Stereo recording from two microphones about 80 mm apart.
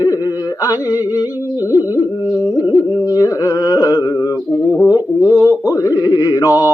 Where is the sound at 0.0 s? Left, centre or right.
Left.